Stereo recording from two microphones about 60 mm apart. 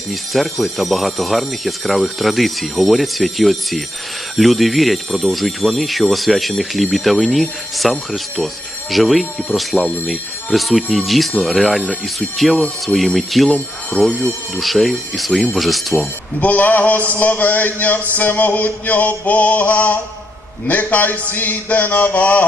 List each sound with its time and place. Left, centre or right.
0.1 s speech: centre
16.4 s mantra: left